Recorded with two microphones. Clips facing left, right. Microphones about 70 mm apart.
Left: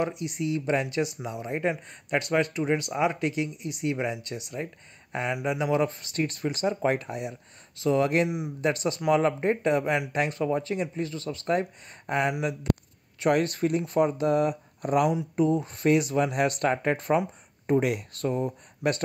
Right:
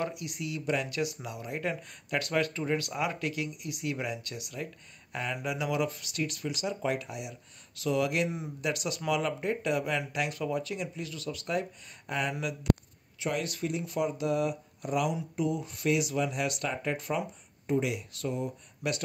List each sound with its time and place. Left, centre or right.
0.0 s speech: left